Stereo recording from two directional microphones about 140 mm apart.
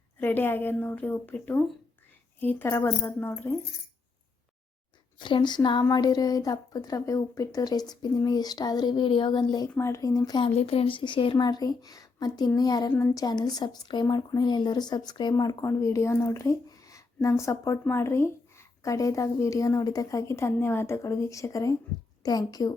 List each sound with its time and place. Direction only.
0.2 s a woman's voice: 15° left (ahead or behind)
5.2 s a woman's voice: 35° left (ahead or behind)
9.7 s speech: 20° left (ahead or behind)
10.6 s a woman's voice: 45° left (ahead or behind); by 22.7 s 25° left (ahead or behind)